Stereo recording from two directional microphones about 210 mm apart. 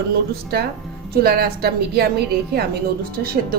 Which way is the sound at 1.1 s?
45° right (ahead or behind).